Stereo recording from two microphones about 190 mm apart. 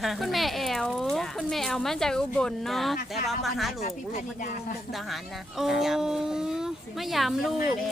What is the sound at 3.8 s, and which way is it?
Speech, 40° left (ahead or behind).